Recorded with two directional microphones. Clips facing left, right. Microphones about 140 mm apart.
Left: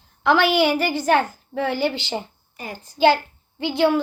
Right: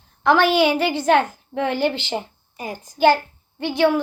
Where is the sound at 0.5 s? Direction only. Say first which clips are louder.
Right 1 dB; 20° right (ahead or behind).